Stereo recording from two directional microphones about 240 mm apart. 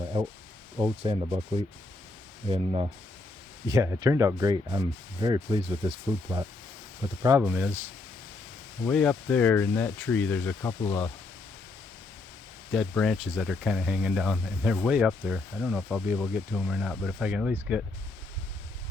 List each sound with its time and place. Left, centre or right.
0.1 s speech: right
2.5 s speech: right
7.2 s speech: centre
8.9 s speech: centre
12.7 s speech: centre